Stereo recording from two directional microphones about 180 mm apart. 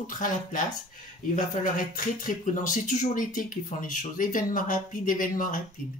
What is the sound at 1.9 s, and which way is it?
Speech, 45° left (ahead or behind).